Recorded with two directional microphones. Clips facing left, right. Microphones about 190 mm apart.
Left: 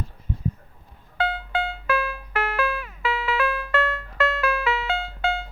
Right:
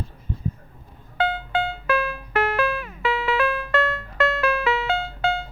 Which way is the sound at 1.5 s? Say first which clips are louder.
Right 2 dB; 40° right (ahead or behind).